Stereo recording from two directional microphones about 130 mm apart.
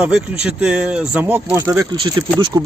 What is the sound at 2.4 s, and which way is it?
Speech, 30° right (ahead or behind).